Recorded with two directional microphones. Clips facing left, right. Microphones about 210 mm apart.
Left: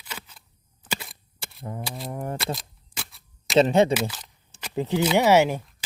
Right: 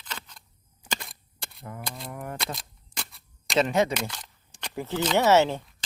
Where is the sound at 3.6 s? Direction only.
30° left (ahead or behind).